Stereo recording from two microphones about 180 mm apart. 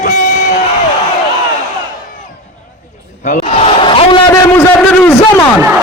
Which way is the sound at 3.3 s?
35° left (ahead or behind).